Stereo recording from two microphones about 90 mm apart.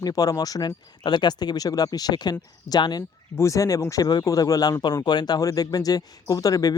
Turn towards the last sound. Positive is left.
turn(degrees=40)  # may be behind; listen again after turning